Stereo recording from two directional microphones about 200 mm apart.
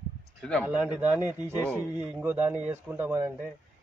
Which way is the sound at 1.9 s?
10° right (ahead or behind).